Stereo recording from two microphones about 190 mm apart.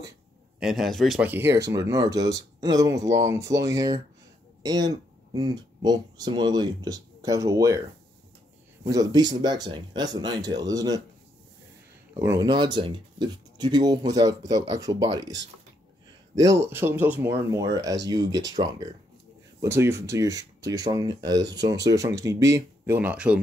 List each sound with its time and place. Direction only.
0.6 s speech: centre (ahead or behind)
8.8 s speech: 20° right (ahead or behind)
12.1 s speech: 15° right (ahead or behind)